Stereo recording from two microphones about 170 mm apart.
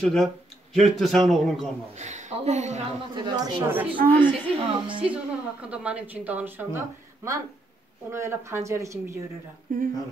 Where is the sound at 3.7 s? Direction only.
10° right (ahead or behind).